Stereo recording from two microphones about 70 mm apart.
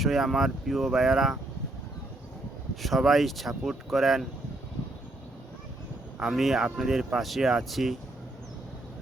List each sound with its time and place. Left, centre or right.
0.0 s speech: centre
2.8 s speech: centre
6.1 s speech: centre